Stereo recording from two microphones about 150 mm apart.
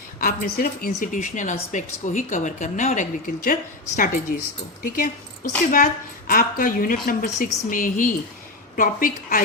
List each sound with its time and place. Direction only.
0.2 s a woman's voice: 80° left